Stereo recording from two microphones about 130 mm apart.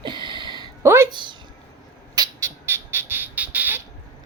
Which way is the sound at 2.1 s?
25° right (ahead or behind).